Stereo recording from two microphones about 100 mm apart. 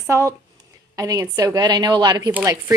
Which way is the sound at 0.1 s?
30° right (ahead or behind).